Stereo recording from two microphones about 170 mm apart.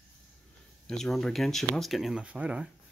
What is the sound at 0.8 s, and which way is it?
Speech, centre (ahead or behind).